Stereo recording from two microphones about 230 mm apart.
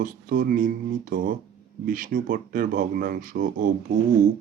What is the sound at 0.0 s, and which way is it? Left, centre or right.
Speech, right.